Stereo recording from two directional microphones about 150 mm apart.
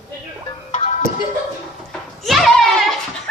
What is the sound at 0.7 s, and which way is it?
Music, 55° left (ahead or behind).